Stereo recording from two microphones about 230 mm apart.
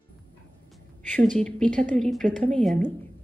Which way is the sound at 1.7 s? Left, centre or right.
Right.